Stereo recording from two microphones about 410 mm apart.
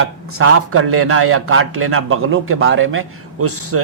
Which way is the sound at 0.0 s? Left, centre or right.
Right.